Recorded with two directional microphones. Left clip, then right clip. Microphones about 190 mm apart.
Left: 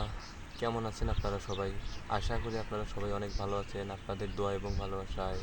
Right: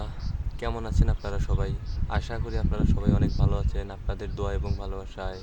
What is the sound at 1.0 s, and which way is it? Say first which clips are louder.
Speech: right 2 dB; 20° right (ahead or behind).